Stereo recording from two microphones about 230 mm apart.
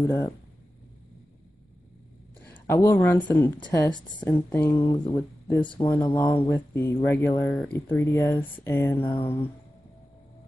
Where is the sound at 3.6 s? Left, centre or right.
Centre.